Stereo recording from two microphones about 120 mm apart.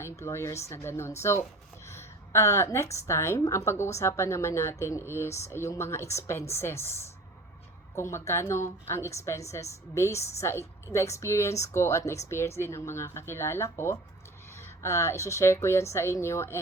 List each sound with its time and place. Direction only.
0.0 s a woman's voice: 25° left (ahead or behind)
1.9 s a sound: 25° left (ahead or behind)
3.1 s a woman's voice: 25° left (ahead or behind)